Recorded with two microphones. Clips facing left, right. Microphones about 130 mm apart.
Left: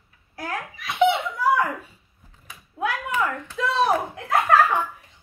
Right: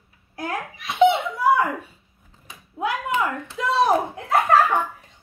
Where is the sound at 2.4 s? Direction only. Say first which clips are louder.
Right 1 dB; 25° right (ahead or behind).